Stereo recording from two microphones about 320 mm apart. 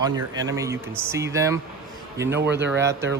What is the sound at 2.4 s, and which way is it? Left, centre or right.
Speech, right.